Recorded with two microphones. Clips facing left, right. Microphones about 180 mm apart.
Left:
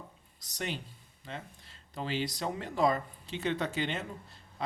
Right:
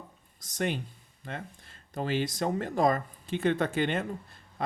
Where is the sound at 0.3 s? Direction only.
50° right (ahead or behind).